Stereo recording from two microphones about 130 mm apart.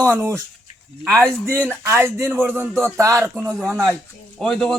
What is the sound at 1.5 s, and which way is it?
Speech, 15° right (ahead or behind).